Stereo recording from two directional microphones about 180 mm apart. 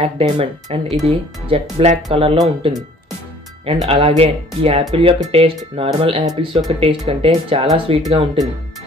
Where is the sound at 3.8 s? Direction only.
30° right (ahead or behind).